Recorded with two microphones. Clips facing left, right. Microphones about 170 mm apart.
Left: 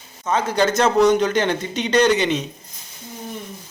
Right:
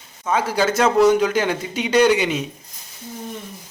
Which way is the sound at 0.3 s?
10° right (ahead or behind).